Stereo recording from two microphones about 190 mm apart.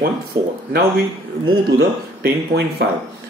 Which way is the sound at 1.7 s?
60° right (ahead or behind).